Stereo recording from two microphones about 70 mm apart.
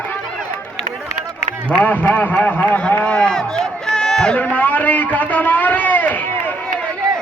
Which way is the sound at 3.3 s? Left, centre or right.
Centre.